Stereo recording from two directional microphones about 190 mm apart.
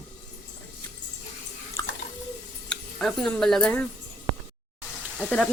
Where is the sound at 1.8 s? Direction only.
15° left (ahead or behind).